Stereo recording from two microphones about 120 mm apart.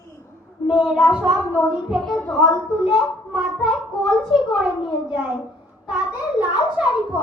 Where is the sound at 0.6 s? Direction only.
40° left (ahead or behind).